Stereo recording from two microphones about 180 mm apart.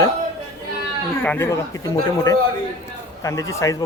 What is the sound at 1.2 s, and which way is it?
Speech, 15° left (ahead or behind).